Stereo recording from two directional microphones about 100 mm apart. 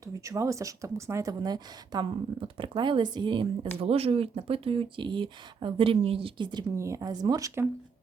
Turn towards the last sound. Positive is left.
turn(degrees=-30)  # may be behind; listen again after turning